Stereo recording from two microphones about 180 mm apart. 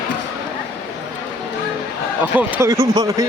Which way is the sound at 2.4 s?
15° right (ahead or behind).